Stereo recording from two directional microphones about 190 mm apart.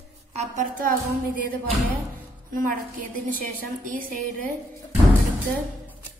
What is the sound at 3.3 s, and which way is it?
A woman's voice, 45° right (ahead or behind).